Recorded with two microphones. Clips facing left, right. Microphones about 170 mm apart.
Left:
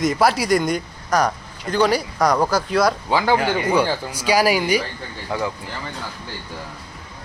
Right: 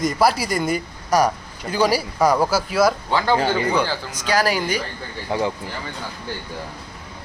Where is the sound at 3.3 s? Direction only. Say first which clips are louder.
Even; 30° right (ahead or behind).